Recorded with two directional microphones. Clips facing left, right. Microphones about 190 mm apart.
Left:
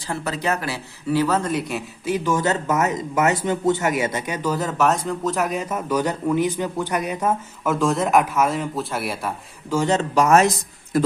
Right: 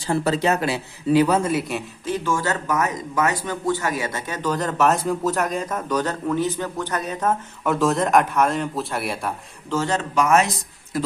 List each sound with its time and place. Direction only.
0.1 s speech: 30° right (ahead or behind); by 1.8 s centre (ahead or behind)
2.0 s speech: 15° left (ahead or behind)
9.7 s speech: 20° left (ahead or behind)
10.2 s speech: 40° left (ahead or behind)
10.9 s a man's voice: 50° left (ahead or behind)